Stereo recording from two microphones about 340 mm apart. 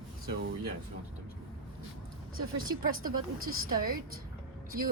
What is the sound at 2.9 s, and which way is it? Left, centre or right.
Speech, right.